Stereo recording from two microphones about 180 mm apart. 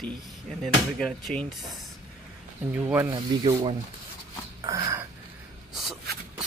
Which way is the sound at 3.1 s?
20° right (ahead or behind).